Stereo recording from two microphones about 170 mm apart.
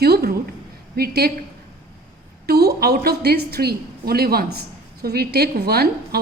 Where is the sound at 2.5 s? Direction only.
65° right (ahead or behind).